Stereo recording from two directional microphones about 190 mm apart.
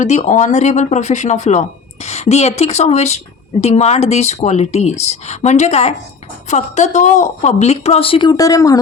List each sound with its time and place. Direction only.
0.0 s speech: 40° left (ahead or behind); by 8.8 s 20° left (ahead or behind)